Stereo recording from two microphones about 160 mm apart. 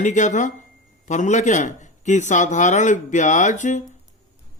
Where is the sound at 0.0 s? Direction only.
50° left (ahead or behind).